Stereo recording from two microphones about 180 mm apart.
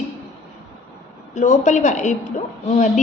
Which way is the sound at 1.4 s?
40° left (ahead or behind).